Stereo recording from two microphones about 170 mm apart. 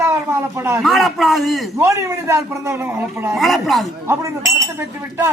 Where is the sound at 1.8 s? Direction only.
15° right (ahead or behind).